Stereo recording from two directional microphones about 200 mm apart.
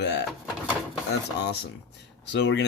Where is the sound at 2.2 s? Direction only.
60° left (ahead or behind).